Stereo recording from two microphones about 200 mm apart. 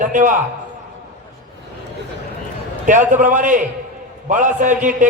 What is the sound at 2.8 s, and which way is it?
A man's voice, 40° right (ahead or behind).